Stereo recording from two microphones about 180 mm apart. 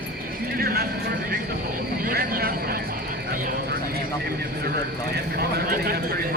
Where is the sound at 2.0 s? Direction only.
55° right (ahead or behind).